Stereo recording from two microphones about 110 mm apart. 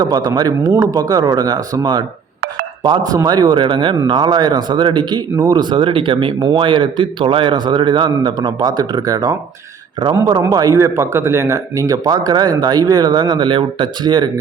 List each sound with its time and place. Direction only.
0.0 s speech: 35° right (ahead or behind)
10.4 s speech: 30° right (ahead or behind)